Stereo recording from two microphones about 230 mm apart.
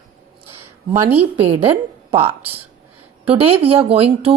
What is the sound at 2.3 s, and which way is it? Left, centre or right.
Speech, centre.